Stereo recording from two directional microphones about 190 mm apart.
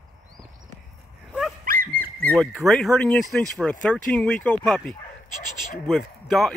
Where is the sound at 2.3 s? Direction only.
Centre (ahead or behind).